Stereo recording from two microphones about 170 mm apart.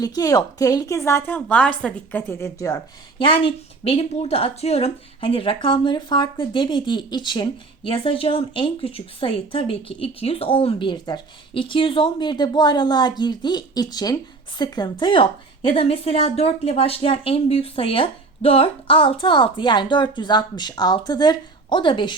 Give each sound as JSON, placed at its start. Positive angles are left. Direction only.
{"t": 0.0, "sound": "a woman's voice", "side_deg": 20}